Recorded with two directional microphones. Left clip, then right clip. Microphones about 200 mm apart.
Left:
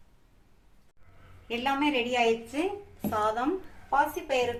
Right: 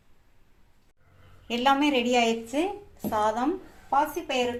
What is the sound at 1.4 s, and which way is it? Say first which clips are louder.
A woman's voice: right 5 dB; 45° right (ahead or behind).